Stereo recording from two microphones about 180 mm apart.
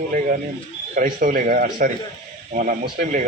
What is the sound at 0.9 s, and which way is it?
A man's voice, 50° right (ahead or behind).